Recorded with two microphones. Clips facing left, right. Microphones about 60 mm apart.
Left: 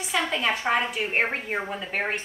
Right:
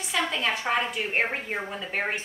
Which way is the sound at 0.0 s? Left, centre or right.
Centre.